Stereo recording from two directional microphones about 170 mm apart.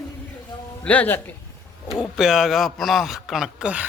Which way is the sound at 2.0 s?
5° right (ahead or behind).